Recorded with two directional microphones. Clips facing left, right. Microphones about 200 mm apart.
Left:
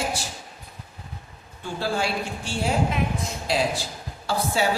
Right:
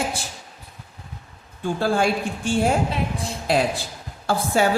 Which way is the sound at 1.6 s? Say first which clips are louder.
Right 6 dB; 50° right (ahead or behind).